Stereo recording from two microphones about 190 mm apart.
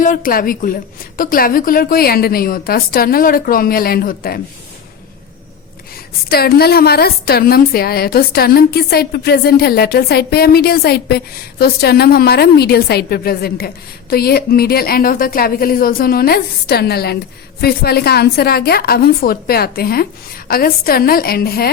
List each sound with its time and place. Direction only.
0.0 s a woman's voice: 45° left (ahead or behind)
6.2 s a woman's voice: 55° left (ahead or behind)